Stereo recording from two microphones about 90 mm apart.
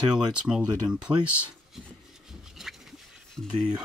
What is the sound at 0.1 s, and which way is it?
Speech, 5° right (ahead or behind).